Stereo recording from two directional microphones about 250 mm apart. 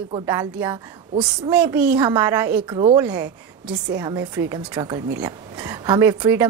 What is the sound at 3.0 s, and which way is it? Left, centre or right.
A woman's voice, centre.